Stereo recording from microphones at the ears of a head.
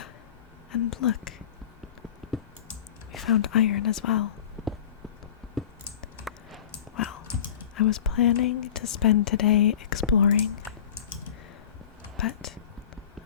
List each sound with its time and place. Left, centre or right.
0.7 s speech: left
3.2 s speech: left
6.7 s speech: left
12.1 s a sound: left